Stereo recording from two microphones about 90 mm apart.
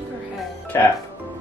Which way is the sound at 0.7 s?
35° left (ahead or behind).